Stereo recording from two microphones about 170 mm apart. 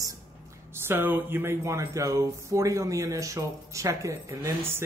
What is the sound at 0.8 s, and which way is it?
Speech, 10° right (ahead or behind).